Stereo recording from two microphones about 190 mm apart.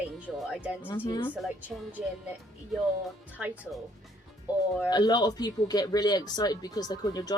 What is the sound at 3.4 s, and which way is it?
Speech, 5° right (ahead or behind).